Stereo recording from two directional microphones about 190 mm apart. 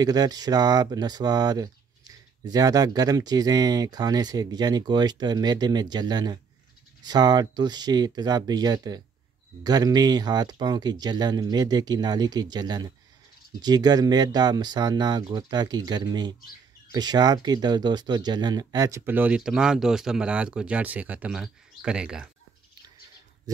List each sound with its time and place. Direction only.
0.0 s speech: 20° right (ahead or behind); by 22.3 s 5° right (ahead or behind)